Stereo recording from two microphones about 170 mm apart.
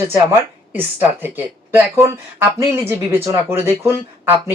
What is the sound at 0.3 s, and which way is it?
Speech, 10° right (ahead or behind).